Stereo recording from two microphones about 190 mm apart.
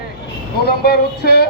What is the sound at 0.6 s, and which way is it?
Speech, 55° left (ahead or behind).